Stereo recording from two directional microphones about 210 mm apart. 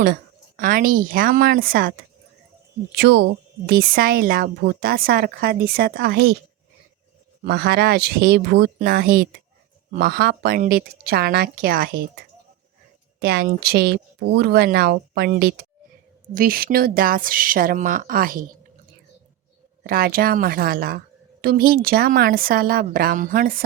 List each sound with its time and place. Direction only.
0.0 s a woman's voice: 45° right (ahead or behind)
7.4 s a woman's voice: 50° right (ahead or behind)
13.1 s a woman's voice: 50° right (ahead or behind)
19.8 s a woman's voice: 45° right (ahead or behind)